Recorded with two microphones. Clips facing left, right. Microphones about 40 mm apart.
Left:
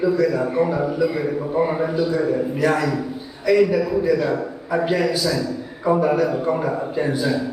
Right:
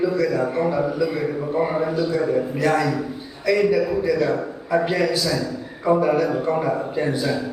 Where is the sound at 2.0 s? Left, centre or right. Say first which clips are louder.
Left 1 dB; centre.